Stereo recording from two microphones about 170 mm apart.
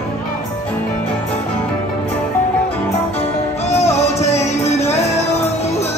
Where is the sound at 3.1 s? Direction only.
40° left (ahead or behind).